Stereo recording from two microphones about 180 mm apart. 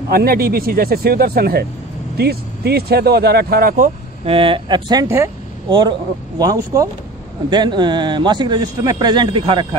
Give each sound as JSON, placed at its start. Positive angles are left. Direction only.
{"t": 0.1, "sound": "speech", "side_deg": -55}
{"t": 4.3, "sound": "speech", "side_deg": -30}